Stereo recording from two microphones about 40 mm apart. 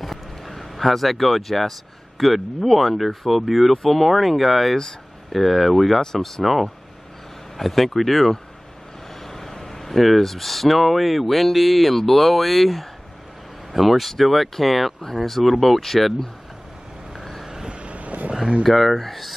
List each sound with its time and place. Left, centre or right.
0.0 s speech: centre
17.1 s vehicle: centre
17.5 s vehicle: centre
17.7 s vehicle: right
18.6 s speech: centre